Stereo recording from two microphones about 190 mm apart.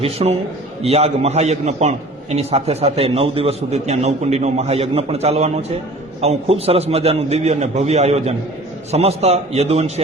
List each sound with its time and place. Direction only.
0.0 s a man's voice: 35° right (ahead or behind)